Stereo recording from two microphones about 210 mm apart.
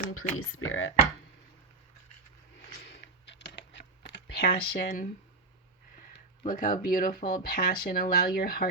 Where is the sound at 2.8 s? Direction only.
55° left (ahead or behind).